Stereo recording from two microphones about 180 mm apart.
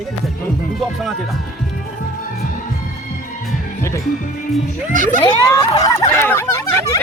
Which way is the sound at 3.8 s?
15° left (ahead or behind).